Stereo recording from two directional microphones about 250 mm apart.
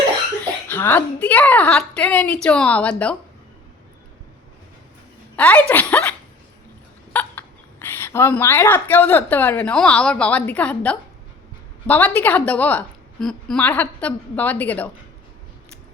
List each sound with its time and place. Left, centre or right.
0.7 s a woman's voice: centre
5.4 s a woman's voice: centre